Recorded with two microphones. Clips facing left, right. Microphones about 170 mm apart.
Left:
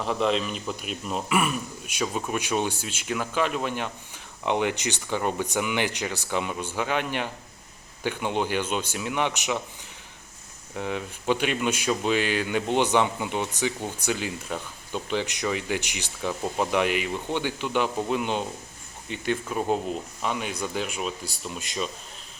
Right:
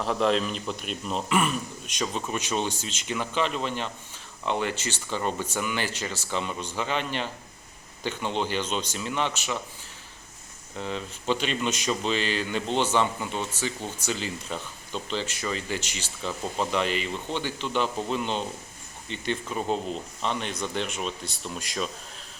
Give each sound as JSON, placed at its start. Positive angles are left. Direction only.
{"t": 0.0, "sound": "speech", "side_deg": 0}
{"t": 10.8, "sound": "speech", "side_deg": 10}